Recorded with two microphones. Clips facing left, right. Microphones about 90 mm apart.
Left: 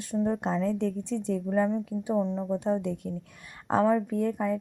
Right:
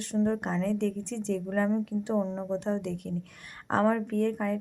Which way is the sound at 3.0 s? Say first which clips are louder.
Right 1 dB; 15° left (ahead or behind).